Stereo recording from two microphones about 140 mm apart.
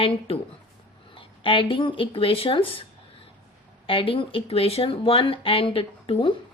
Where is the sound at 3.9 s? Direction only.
40° left (ahead or behind).